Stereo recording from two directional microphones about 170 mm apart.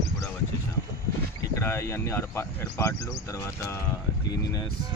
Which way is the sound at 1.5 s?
15° left (ahead or behind).